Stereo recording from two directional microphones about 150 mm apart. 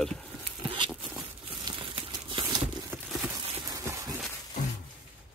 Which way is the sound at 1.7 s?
35° right (ahead or behind).